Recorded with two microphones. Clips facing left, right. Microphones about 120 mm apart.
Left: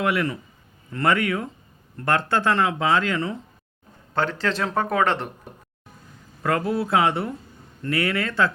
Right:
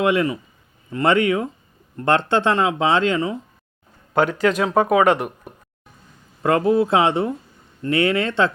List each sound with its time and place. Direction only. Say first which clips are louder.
0.0 s speech: right 5 dB; 20° right (ahead or behind)
6.4 s speech: right 6 dB; 20° right (ahead or behind)